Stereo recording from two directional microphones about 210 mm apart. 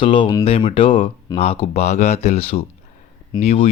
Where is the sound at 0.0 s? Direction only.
25° left (ahead or behind).